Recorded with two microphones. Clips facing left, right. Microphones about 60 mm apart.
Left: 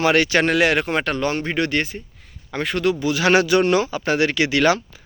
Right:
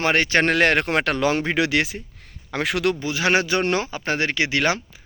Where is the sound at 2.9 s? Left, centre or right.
Right.